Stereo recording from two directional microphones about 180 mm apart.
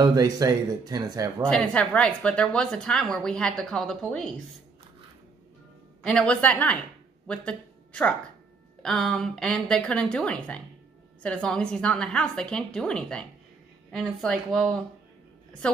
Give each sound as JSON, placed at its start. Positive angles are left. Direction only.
{"t": 0.0, "sound": "speech", "side_deg": -20}
{"t": 1.4, "sound": "a woman's voice", "side_deg": 5}
{"t": 6.0, "sound": "a woman's voice", "side_deg": 5}